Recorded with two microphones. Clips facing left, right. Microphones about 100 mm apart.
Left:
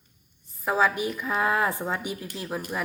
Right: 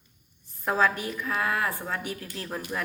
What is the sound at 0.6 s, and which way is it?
A woman's voice, 5° left (ahead or behind).